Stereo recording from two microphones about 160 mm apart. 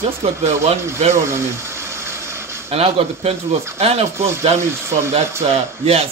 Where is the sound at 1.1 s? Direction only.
15° right (ahead or behind).